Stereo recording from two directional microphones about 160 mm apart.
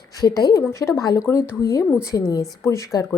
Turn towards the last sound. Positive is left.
turn(degrees=20)  # may be behind; listen again after turning